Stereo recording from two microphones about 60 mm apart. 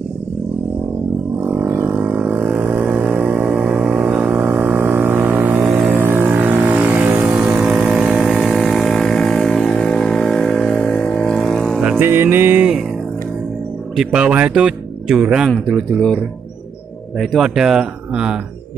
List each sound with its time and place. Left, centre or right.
1.4 s a sound: right
2.8 s music: right
3.4 s music: centre
3.9 s a sound: centre
5.8 s vehicle: right; by 11.8 s centre
12.0 s music: right
14.1 s speech: centre
15.0 s speech: centre
15.5 s speech: centre
17.2 s speech: centre